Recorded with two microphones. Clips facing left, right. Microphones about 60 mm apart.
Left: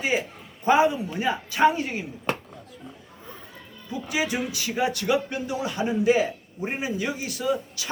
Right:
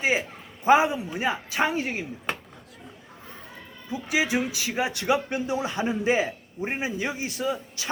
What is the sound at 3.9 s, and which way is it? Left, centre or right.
A man's voice, right.